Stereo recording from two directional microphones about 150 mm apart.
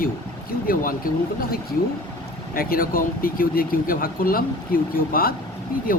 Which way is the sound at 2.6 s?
75° left (ahead or behind).